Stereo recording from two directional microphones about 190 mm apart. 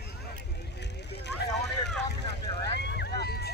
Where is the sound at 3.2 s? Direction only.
55° left (ahead or behind).